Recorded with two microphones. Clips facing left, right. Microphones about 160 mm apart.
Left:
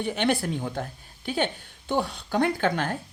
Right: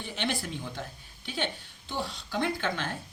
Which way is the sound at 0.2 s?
55° left (ahead or behind).